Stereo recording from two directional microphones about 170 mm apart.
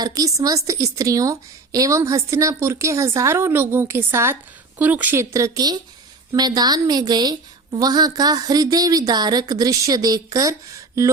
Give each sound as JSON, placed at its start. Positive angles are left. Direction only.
{"t": 0.0, "sound": "a woman's voice", "side_deg": -20}